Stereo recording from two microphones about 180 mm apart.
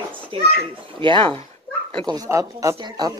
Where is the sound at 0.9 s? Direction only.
30° right (ahead or behind).